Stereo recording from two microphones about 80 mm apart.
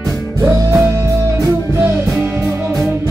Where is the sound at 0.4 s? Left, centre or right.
Right.